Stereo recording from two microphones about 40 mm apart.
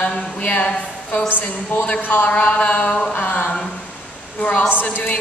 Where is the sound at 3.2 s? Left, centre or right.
Left.